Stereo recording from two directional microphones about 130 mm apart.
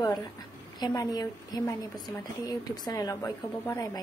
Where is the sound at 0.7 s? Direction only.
30° left (ahead or behind).